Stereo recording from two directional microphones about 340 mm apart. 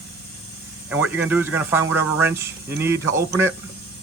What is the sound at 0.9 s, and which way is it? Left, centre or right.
Speech, centre.